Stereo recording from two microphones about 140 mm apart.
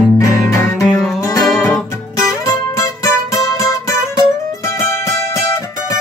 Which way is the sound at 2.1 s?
20° left (ahead or behind).